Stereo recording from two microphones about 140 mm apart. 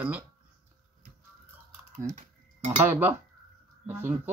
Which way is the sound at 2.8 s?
15° right (ahead or behind).